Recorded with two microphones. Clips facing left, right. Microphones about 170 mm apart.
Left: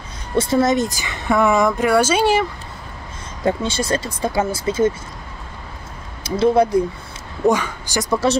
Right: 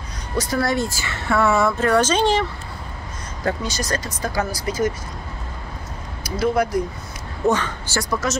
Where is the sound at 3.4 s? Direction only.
25° left (ahead or behind).